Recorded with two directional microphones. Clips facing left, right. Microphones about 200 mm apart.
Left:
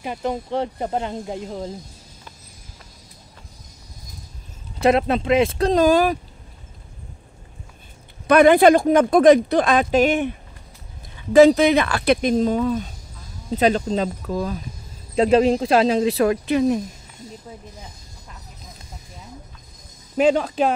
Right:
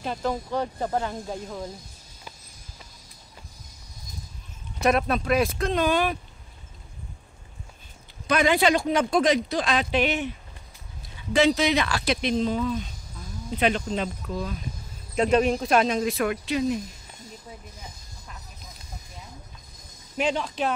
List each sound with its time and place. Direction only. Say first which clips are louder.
0.0 s speech: left 2 dB; 15° left (ahead or behind)
4.8 s speech: left 5 dB; 25° left (ahead or behind); by 6.1 s 40° left (ahead or behind)
8.3 s speech: left 9 dB; 55° left (ahead or behind)
11.3 s speech: left 9 dB; 50° left (ahead or behind)
15.1 s speech: left 5 dB; 30° left (ahead or behind)
16.4 s speech: left 6 dB; 50° left (ahead or behind)